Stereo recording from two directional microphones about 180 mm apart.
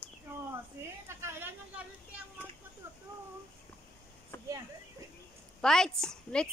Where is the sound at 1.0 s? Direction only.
15° right (ahead or behind).